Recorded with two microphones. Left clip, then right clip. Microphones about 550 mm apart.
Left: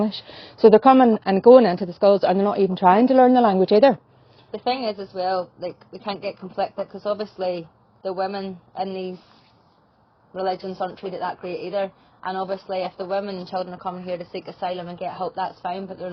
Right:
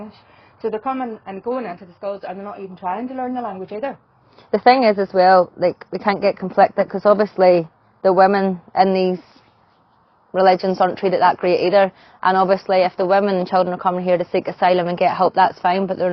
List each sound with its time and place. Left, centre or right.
0.6 s a woman's voice: left
4.5 s a woman's voice: right
10.3 s a woman's voice: right